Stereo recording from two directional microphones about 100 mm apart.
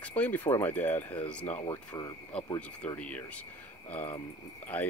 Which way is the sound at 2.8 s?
15° left (ahead or behind).